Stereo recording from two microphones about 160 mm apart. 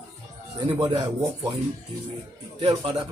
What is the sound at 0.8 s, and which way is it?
Speech, 25° right (ahead or behind).